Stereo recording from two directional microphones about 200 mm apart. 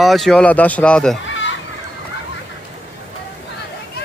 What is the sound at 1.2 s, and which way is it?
Children playing, 70° left (ahead or behind).